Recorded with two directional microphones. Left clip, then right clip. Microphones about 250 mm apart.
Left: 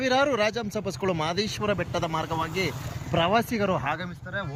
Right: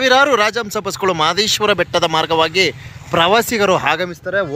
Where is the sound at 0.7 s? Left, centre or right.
Right.